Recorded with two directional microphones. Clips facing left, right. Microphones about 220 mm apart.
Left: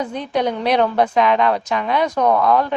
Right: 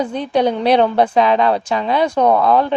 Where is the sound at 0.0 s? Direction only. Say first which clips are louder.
Right 4 dB; 30° right (ahead or behind).